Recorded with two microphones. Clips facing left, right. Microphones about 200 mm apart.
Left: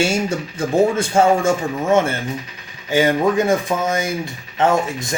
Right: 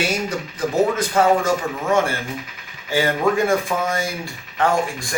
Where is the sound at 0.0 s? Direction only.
25° left (ahead or behind).